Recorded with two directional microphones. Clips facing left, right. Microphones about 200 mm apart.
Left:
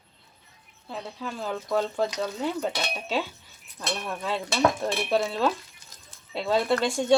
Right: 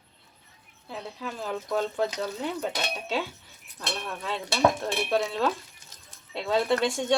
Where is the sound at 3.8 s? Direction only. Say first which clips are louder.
Left 3 dB; 5° left (ahead or behind).